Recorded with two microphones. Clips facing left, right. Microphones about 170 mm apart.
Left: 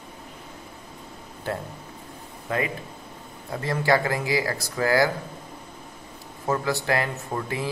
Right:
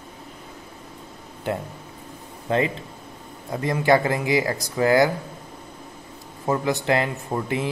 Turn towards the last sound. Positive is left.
turn(degrees=-20)  # may be behind; listen again after turning